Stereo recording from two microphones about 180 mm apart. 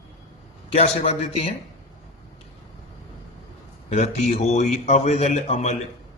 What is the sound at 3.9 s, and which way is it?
A man's voice, 40° left (ahead or behind).